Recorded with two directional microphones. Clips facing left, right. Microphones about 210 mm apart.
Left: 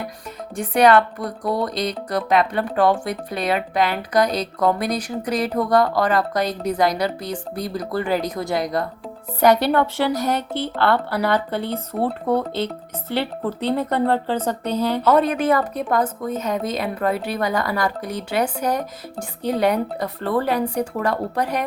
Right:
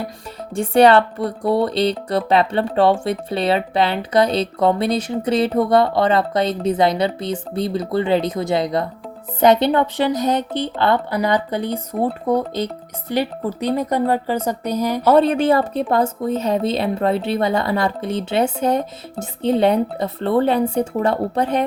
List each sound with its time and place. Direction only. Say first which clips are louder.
0.5 s speech: right 3 dB; 30° right (ahead or behind); by 15.0 s 10° right (ahead or behind)
15.0 s speech: right 4 dB; 30° right (ahead or behind)